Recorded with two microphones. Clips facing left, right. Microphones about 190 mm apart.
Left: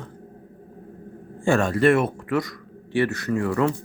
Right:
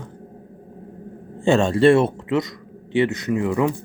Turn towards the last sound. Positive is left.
turn(degrees=-15)  # may be behind; listen again after turning